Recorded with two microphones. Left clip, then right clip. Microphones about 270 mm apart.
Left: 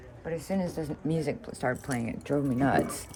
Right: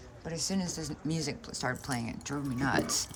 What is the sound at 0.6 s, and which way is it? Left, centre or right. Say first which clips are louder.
Speech: left 5 dB; right.